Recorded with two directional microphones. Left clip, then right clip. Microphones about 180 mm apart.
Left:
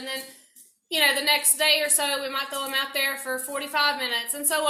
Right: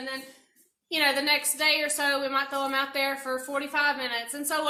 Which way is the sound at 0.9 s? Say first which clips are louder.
Left 3 dB; 20° right (ahead or behind).